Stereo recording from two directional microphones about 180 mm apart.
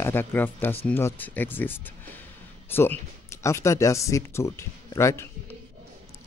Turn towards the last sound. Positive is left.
turn(degrees=15)  # may be behind; listen again after turning